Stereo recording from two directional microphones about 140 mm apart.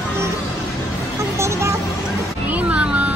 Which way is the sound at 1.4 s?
20° right (ahead or behind).